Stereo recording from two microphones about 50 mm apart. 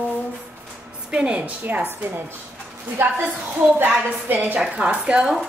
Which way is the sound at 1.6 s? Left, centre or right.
Right.